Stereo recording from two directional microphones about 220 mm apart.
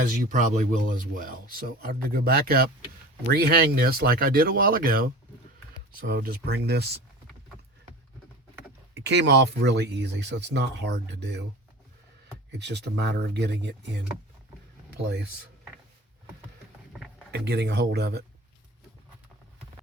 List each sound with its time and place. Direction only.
0.1 s speech: 35° right (ahead or behind)
9.0 s speech: 50° right (ahead or behind)
12.5 s speech: 50° right (ahead or behind)
17.3 s speech: 50° right (ahead or behind)